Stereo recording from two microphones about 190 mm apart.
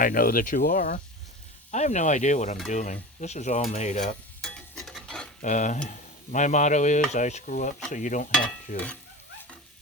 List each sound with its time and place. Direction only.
0.0 s speech: 45° left (ahead or behind)
1.7 s stir: 40° left (ahead or behind)
4.4 s stir: 5° left (ahead or behind)
5.4 s stir: 40° left (ahead or behind)
8.7 s speech: 45° left (ahead or behind)